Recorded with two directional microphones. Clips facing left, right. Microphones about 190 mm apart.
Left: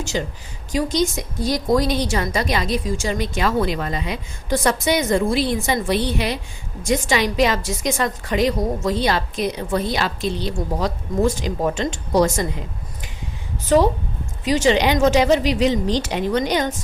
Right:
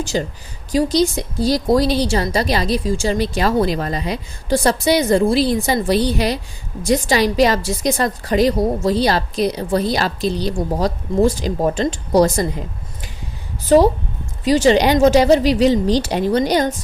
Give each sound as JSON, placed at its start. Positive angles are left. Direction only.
{"t": 0.0, "sound": "a woman's voice", "side_deg": -35}
{"t": 13.7, "sound": "a woman's voice", "side_deg": -35}